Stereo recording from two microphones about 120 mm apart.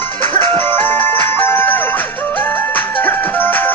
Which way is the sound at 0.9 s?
15° left (ahead or behind).